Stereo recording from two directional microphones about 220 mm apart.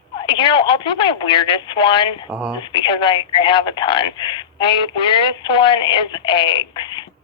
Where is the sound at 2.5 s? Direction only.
20° left (ahead or behind).